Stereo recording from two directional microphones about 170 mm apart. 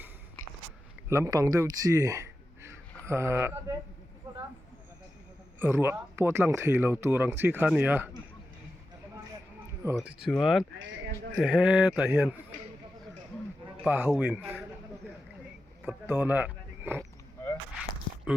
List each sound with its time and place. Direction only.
1.1 s speech: 20° right (ahead or behind)
5.5 s speech: 15° right (ahead or behind)
9.8 s speech: 10° right (ahead or behind)
13.8 s speech: 10° right (ahead or behind)
15.9 s speech: 10° right (ahead or behind)